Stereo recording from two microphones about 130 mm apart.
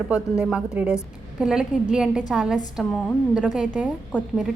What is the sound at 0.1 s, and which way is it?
A woman's voice, 10° right (ahead or behind).